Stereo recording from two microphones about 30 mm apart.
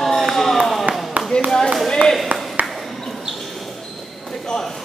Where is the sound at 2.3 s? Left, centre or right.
Right.